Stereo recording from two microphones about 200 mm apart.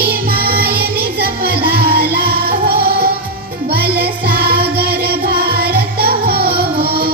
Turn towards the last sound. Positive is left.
turn(degrees=-50)  # may be behind; listen again after turning